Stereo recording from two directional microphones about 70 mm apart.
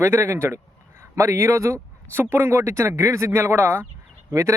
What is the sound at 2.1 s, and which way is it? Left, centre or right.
Speech, right.